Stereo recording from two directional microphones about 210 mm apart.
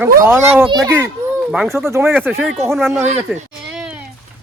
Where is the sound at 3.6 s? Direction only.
5° right (ahead or behind).